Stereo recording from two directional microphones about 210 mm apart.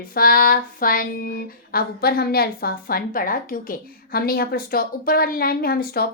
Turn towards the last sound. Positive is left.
turn(degrees=45)  # may be behind; listen again after turning